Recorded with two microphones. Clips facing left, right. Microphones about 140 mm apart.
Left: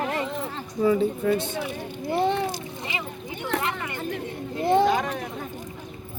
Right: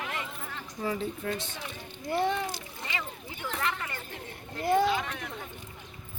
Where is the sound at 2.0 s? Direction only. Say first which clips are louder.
Left 5 dB; 25° left (ahead or behind).